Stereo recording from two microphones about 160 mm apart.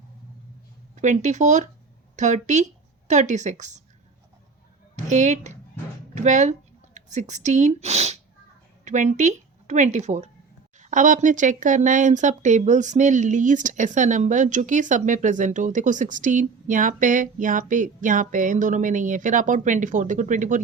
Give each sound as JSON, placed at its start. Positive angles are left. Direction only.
{"t": 1.0, "sound": "speech", "side_deg": -50}
{"t": 5.0, "sound": "a woman's voice", "side_deg": -50}